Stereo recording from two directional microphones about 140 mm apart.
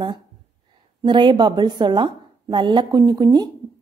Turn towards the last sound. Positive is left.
turn(degrees=-30)  # may be behind; listen again after turning